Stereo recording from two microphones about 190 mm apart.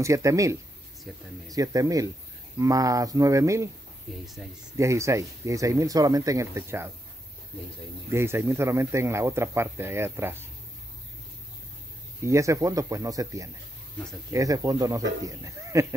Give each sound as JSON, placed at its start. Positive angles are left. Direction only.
{"t": 0.0, "sound": "a man's voice", "side_deg": -15}
{"t": 1.1, "sound": "speech", "side_deg": 0}
{"t": 1.5, "sound": "a man's voice", "side_deg": -20}
{"t": 4.1, "sound": "speech", "side_deg": 0}
{"t": 4.7, "sound": "a man's voice", "side_deg": -15}
{"t": 8.1, "sound": "a man's voice", "side_deg": -15}
{"t": 12.3, "sound": "a man's voice", "side_deg": -15}